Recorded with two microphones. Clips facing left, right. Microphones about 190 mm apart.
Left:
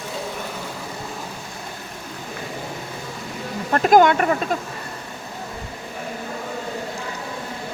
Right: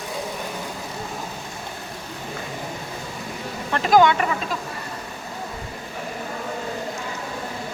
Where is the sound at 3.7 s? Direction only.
50° left (ahead or behind).